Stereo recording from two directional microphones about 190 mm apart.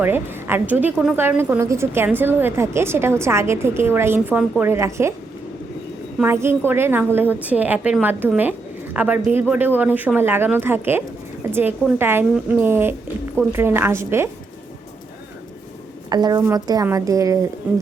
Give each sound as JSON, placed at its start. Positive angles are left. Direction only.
{"t": 0.0, "sound": "a woman's voice", "side_deg": -10}
{"t": 6.1, "sound": "a woman's voice", "side_deg": -10}
{"t": 16.0, "sound": "a woman's voice", "side_deg": -20}